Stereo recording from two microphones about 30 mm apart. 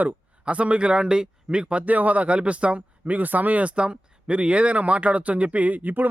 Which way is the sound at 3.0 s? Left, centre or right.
Right.